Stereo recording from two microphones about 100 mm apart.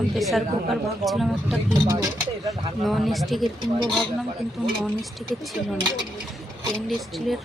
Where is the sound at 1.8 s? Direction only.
35° right (ahead or behind).